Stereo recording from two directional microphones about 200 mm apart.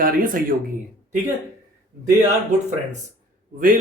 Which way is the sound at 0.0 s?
45° right (ahead or behind).